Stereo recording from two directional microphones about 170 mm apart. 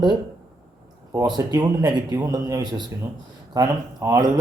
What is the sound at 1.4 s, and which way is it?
Speech, 20° right (ahead or behind).